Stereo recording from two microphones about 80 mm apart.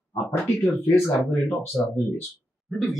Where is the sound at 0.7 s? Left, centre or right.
Left.